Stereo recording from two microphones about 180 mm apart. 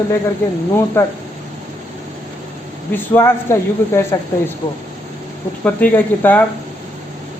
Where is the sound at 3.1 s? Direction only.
15° left (ahead or behind).